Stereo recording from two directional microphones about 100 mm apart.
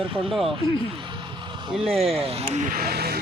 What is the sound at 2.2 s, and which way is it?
Speech, 85° right.